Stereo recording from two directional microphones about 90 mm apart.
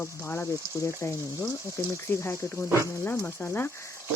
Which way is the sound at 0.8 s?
30° left (ahead or behind).